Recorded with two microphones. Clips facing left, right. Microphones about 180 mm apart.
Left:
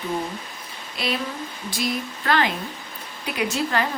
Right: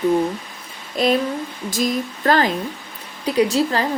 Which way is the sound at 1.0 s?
45° right (ahead or behind).